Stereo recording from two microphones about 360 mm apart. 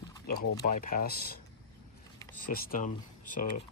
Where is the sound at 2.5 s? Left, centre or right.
Left.